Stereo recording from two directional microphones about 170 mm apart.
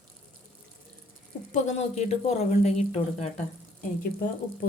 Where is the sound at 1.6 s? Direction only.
40° left (ahead or behind).